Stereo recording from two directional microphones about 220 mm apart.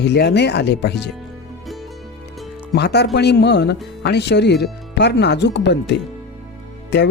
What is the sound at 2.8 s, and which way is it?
Speech, 50° left (ahead or behind).